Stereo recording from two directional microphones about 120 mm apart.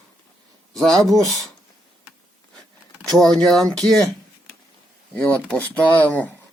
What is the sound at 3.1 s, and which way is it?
Speech, 5° left (ahead or behind).